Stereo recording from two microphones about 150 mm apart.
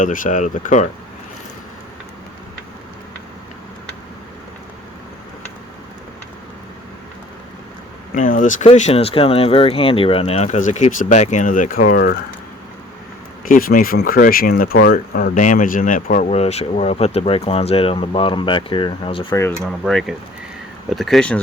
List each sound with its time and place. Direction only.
0.0 s speech: 60° left (ahead or behind)
8.1 s speech: 60° left (ahead or behind)
8.7 s speech: 40° left (ahead or behind); by 12.1 s 75° left (ahead or behind)
13.4 s speech: 70° left (ahead or behind)
16.3 s speech: 45° left (ahead or behind)
19.3 s speech: 15° left (ahead or behind)
19.8 s speech: centre (ahead or behind)